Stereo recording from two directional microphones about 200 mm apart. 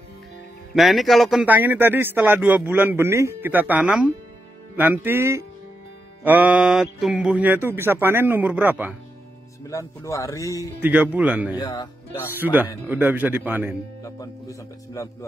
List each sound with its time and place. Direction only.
0.7 s speech: centre (ahead or behind)
9.7 s speech: 15° left (ahead or behind)
10.8 s speech: 5° right (ahead or behind)
11.5 s speech: 20° left (ahead or behind)
12.4 s speech: 10° right (ahead or behind)
14.0 s speech: 15° left (ahead or behind)